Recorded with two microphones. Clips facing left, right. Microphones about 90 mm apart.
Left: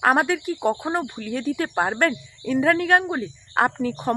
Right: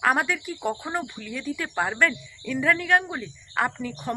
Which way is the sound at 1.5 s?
40° left (ahead or behind).